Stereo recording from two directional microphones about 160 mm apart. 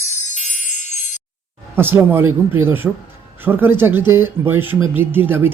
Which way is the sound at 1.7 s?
15° right (ahead or behind).